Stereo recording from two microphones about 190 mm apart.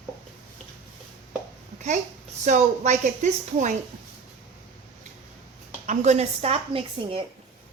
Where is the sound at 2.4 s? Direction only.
40° right (ahead or behind).